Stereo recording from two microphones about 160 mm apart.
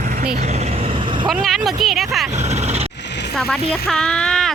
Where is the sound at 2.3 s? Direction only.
45° right (ahead or behind).